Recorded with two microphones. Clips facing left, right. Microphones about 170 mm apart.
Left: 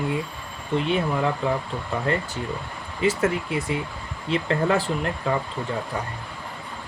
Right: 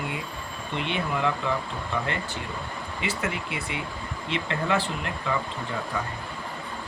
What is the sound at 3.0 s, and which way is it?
Speech, 45° left (ahead or behind).